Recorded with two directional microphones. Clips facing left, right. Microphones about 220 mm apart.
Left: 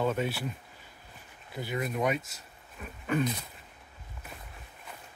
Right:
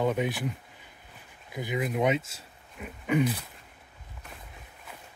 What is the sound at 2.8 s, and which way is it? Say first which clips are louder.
Wild animals: right 3 dB; 15° right (ahead or behind).